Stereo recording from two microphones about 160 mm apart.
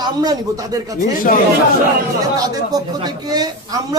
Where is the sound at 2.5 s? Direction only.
25° right (ahead or behind).